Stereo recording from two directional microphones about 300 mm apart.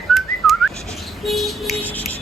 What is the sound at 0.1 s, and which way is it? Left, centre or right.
Whistling, centre.